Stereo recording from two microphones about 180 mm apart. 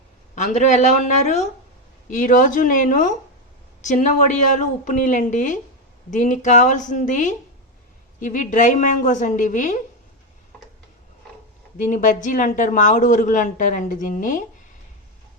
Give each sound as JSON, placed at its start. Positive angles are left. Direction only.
{"t": 0.3, "sound": "speech", "side_deg": 40}
{"t": 11.8, "sound": "speech", "side_deg": 45}